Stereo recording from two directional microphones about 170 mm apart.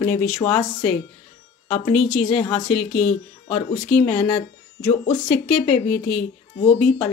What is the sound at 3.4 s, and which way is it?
Speech, 35° left (ahead or behind).